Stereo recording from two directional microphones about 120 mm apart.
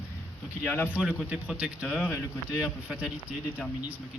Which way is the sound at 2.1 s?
25° left (ahead or behind).